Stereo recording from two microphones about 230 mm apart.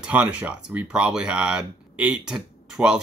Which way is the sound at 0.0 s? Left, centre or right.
Centre.